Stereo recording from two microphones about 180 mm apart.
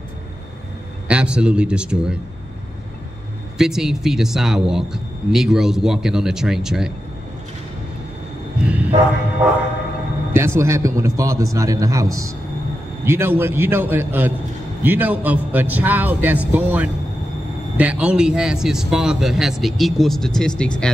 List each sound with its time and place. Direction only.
1.0 s speech: 5° right (ahead or behind)
3.5 s speech: 5° right (ahead or behind)
8.6 s a sound: 10° right (ahead or behind)
10.3 s a man's voice: 15° right (ahead or behind); by 20.9 s 5° left (ahead or behind)